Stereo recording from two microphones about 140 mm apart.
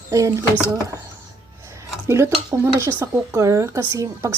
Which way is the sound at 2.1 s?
20° right (ahead or behind).